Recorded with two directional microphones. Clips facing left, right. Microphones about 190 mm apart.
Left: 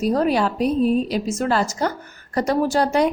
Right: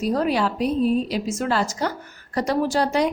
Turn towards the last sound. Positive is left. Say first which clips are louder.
# left 2 dB
turn(degrees=50)  # may be behind; listen again after turning